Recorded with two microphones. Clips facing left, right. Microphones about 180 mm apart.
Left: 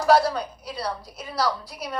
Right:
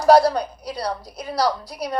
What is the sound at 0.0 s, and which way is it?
A woman's voice, 40° right (ahead or behind).